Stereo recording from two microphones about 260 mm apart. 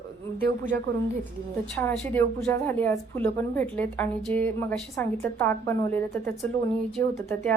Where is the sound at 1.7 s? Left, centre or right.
Centre.